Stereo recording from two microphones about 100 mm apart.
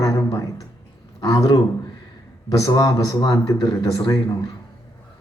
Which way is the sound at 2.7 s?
45° left (ahead or behind).